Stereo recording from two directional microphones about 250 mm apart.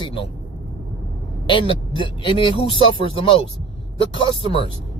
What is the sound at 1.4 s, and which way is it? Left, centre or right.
Speech, centre.